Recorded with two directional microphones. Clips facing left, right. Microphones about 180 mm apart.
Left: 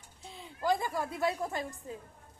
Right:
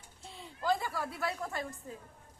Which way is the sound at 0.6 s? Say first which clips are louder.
Left 2 dB; 15° left (ahead or behind).